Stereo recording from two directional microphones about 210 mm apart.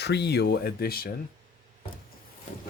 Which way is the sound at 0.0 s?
50° left (ahead or behind).